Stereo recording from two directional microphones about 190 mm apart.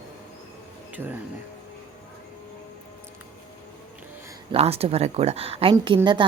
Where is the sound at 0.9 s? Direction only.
10° right (ahead or behind).